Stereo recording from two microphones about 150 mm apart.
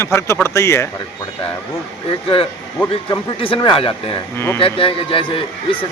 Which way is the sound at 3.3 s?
35° left (ahead or behind).